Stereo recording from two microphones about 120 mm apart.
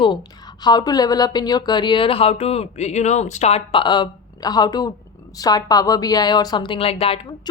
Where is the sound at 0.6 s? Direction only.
35° left (ahead or behind); by 3.6 s 70° left (ahead or behind).